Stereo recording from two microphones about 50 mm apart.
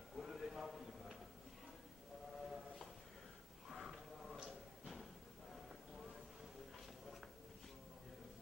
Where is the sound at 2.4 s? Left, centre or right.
Centre.